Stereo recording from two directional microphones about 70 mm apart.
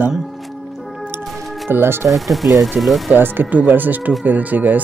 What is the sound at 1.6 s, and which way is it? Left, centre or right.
Speech, right.